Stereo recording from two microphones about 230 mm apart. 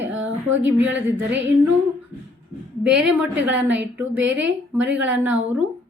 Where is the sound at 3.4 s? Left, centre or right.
Centre.